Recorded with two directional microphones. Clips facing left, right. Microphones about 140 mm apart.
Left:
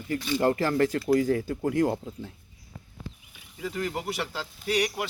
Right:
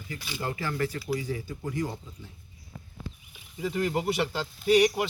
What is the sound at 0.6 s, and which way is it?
Speech, 40° left (ahead or behind).